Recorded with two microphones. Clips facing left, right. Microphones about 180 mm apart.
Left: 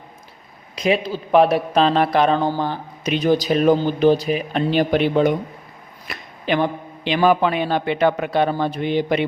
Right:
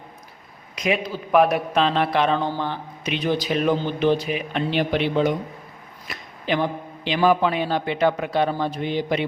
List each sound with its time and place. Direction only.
0.8 s a man's voice: 30° left (ahead or behind); by 5.3 s 50° left (ahead or behind)
6.1 s a man's voice: 60° left (ahead or behind)